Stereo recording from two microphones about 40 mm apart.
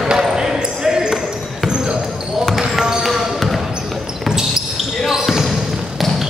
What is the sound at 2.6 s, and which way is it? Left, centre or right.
Basketball bounce, centre.